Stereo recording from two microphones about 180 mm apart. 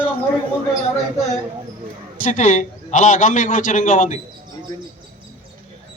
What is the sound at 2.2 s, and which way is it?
A man's voice, 45° left (ahead or behind).